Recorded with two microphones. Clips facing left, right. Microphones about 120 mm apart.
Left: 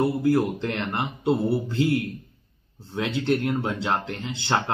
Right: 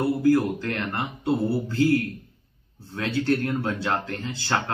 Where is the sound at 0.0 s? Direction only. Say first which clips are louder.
Right 1 dB; 25° left (ahead or behind).